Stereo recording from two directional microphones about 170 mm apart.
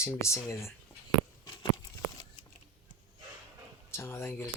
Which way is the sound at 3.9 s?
15° left (ahead or behind).